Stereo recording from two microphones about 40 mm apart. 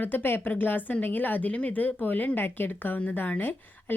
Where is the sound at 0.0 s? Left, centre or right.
Left.